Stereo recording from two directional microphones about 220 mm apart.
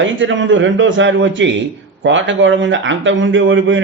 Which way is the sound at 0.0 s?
60° right (ahead or behind).